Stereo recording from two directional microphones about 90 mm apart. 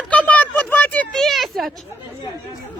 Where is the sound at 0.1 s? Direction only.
15° left (ahead or behind).